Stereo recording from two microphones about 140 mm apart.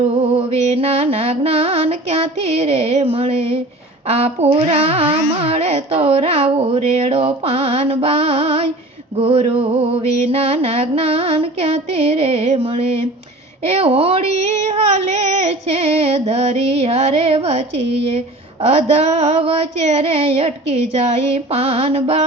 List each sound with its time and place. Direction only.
0.2 s mantra: 50° right (ahead or behind)
4.1 s carnatic music: 45° right (ahead or behind)
18.6 s carnatic music: 50° right (ahead or behind)